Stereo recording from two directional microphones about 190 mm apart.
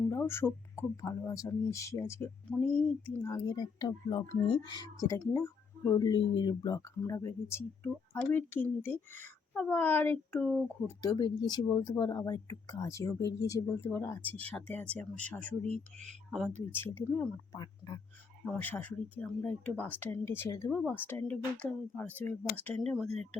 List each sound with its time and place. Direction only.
0.1 s speech: 15° left (ahead or behind)
11.0 s speech: 20° left (ahead or behind); by 23.0 s centre (ahead or behind)
23.0 s speech: 35° right (ahead or behind)